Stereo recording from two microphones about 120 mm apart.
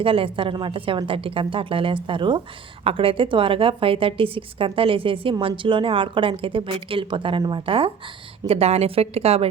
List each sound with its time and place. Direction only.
0.0 s a woman's voice: 50° right (ahead or behind)